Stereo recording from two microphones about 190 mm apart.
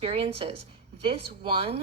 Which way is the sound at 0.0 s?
30° right (ahead or behind).